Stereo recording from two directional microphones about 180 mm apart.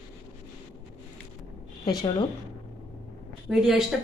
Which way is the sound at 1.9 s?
20° left (ahead or behind).